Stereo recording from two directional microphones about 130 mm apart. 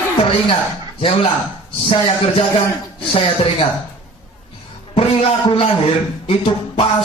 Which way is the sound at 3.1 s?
45° left (ahead or behind).